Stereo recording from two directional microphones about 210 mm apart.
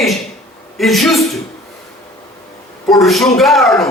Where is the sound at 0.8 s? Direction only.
Centre (ahead or behind).